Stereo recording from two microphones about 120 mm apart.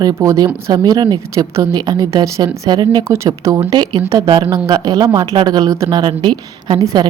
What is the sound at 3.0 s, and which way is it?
Speech, 25° right (ahead or behind).